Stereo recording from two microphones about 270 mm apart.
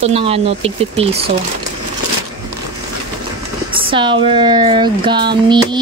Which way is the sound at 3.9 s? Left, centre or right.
Centre.